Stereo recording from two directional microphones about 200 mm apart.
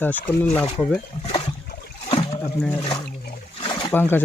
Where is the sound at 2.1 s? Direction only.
30° left (ahead or behind).